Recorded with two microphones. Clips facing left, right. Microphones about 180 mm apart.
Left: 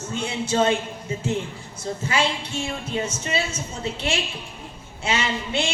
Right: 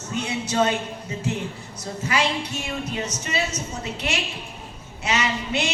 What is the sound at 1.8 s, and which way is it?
A woman's voice, 25° left (ahead or behind).